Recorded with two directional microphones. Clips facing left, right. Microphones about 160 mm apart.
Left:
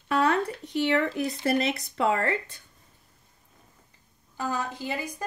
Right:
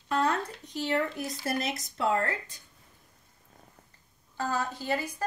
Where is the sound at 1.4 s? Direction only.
80° left.